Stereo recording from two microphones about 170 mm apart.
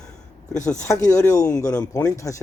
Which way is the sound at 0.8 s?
20° left (ahead or behind).